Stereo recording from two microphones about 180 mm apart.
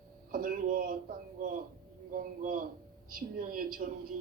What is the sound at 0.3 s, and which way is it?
Speech, 55° right (ahead or behind).